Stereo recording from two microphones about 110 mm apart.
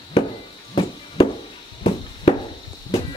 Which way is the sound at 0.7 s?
55° left (ahead or behind).